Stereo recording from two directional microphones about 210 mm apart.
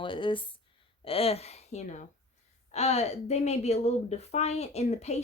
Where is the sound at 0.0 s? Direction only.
25° left (ahead or behind).